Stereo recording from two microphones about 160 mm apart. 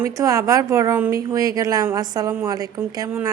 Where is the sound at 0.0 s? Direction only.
20° right (ahead or behind).